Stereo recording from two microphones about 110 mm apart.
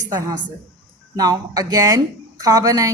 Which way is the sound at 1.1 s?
35° right (ahead or behind).